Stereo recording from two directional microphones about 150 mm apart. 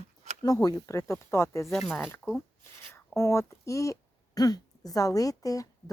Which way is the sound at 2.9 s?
20° left (ahead or behind).